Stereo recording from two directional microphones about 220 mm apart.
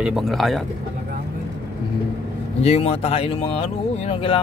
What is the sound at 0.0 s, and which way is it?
Speech, centre (ahead or behind).